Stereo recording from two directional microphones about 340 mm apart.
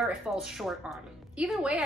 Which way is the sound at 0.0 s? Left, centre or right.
Centre.